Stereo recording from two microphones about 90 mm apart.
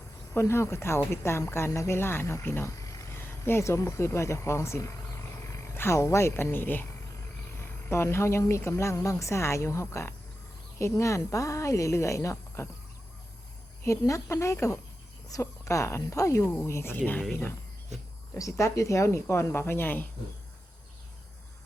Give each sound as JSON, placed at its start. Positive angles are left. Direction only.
{"t": 0.3, "sound": "speech", "side_deg": 30}
{"t": 2.7, "sound": "speech", "side_deg": 40}
{"t": 14.0, "sound": "speech", "side_deg": 35}
{"t": 18.3, "sound": "speech", "side_deg": 35}